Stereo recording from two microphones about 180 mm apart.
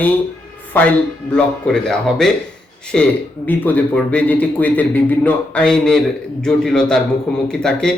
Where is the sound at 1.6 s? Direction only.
5° left (ahead or behind).